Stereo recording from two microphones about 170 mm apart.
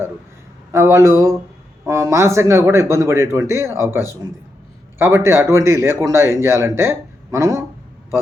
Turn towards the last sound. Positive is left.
turn(degrees=-15)  # may be behind; listen again after turning